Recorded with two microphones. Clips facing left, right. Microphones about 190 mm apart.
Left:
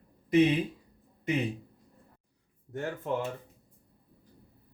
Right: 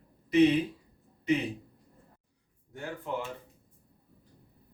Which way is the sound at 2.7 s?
50° left (ahead or behind).